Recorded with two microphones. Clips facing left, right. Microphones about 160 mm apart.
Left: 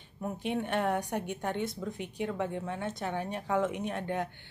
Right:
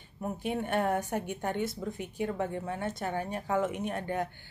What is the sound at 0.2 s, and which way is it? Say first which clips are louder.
A woman's voice: even; 5° right (ahead or behind).